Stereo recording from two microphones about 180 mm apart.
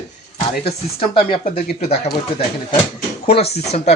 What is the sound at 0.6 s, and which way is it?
Speech, 30° left (ahead or behind).